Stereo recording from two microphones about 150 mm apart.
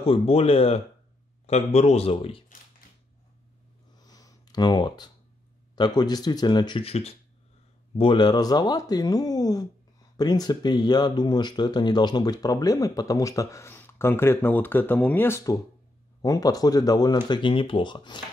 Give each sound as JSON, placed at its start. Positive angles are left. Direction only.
{"t": 0.0, "sound": "a man's voice", "side_deg": 40}
{"t": 4.0, "sound": "a sound", "side_deg": 25}
{"t": 5.8, "sound": "speech", "side_deg": 25}
{"t": 6.8, "sound": "a man's voice", "side_deg": 40}
{"t": 8.0, "sound": "speech", "side_deg": 30}